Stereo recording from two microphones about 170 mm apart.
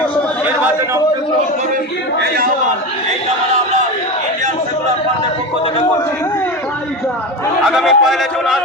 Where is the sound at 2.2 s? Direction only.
60° right (ahead or behind).